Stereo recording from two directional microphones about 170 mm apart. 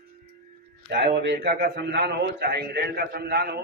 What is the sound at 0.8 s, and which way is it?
A man's voice, 80° right.